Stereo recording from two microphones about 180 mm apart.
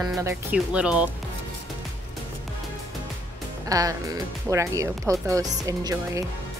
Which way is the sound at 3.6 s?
20° right (ahead or behind).